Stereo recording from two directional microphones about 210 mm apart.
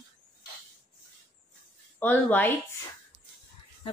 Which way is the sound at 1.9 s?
10° left (ahead or behind).